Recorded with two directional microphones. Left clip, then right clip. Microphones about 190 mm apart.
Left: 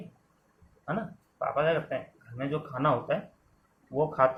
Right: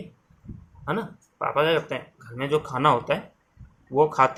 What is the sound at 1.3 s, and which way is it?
Speech, 60° right (ahead or behind).